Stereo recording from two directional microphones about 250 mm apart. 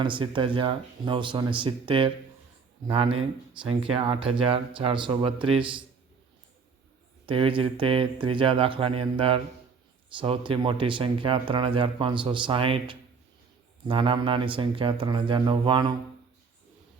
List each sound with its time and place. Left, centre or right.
0.0 s speech: centre
7.3 s speech: right